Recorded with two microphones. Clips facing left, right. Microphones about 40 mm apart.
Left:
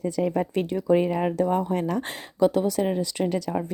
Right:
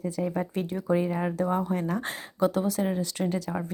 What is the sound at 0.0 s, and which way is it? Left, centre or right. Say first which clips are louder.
A woman's voice: left 5 dB; left.